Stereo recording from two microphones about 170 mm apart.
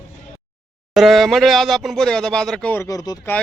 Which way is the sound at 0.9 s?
Centre (ahead or behind).